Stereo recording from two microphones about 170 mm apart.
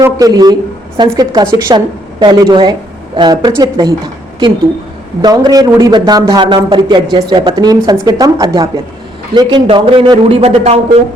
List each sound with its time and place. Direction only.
0.0 s a woman's voice: 20° right (ahead or behind); by 10.8 s 35° right (ahead or behind)